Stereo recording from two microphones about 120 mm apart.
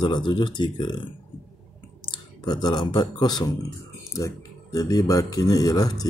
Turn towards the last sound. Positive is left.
turn(degrees=30)  # may be behind; listen again after turning